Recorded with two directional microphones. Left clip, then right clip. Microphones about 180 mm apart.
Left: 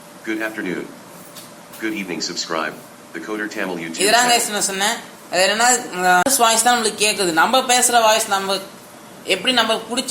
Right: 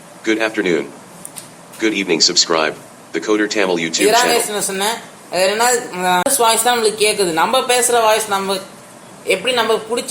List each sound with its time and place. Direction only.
0.3 s speech: 65° right (ahead or behind)
1.8 s speech: 65° right (ahead or behind)
4.1 s speech: 20° left (ahead or behind)